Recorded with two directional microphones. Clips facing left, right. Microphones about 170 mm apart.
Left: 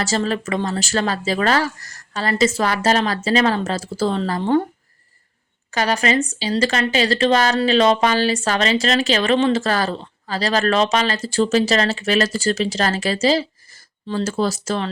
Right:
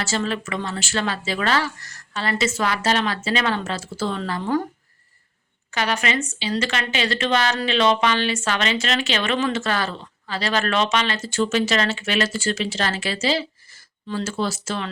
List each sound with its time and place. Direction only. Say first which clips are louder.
0.0 s speech: left 4 dB; 35° left (ahead or behind)
5.7 s speech: left 5 dB; 35° left (ahead or behind)